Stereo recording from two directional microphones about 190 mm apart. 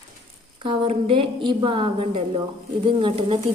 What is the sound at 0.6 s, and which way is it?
A woman's voice, 30° right (ahead or behind).